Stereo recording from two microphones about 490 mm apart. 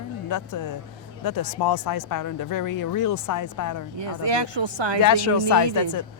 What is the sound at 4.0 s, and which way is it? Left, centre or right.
Speech, right.